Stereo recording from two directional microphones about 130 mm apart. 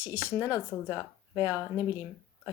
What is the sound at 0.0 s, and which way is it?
Speech, 15° right (ahead or behind).